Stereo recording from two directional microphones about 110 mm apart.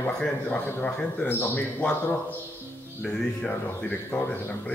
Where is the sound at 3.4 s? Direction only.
10° left (ahead or behind).